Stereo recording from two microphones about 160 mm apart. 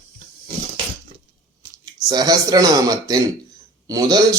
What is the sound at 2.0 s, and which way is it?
A man's voice, 25° right (ahead or behind).